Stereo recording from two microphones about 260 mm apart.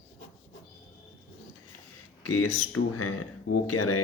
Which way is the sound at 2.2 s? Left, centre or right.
Left.